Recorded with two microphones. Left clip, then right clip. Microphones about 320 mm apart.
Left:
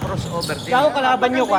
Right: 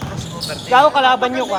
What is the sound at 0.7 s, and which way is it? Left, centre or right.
Speech, centre.